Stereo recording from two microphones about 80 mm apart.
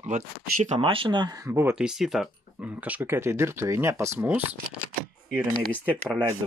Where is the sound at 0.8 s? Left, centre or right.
Right.